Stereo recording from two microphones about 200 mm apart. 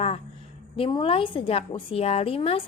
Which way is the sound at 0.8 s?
25° left (ahead or behind).